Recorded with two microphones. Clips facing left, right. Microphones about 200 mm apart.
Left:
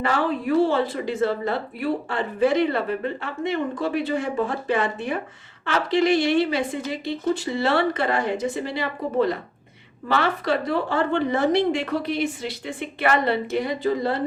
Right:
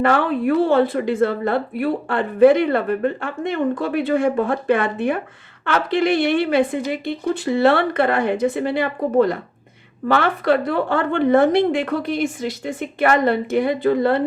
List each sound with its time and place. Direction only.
0.0 s a woman's voice: 55° right (ahead or behind)